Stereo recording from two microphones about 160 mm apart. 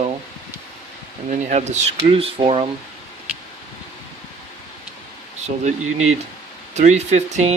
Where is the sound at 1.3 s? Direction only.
45° right (ahead or behind).